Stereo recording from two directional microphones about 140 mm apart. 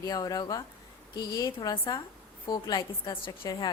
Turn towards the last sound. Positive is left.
turn(degrees=35)  # may be behind; listen again after turning